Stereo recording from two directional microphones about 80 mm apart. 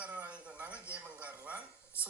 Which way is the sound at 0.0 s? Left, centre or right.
Centre.